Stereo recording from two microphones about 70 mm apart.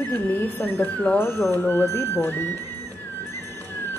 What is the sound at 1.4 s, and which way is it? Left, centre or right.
Speech, left.